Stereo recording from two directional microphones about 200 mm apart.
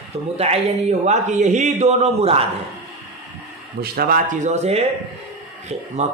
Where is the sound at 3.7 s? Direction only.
50° right (ahead or behind); by 4.9 s 30° right (ahead or behind).